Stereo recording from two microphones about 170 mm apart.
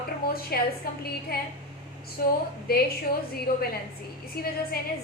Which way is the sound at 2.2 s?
60° left (ahead or behind).